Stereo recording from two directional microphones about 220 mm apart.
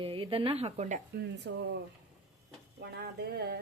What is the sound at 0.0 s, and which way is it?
A woman's voice, 25° right (ahead or behind).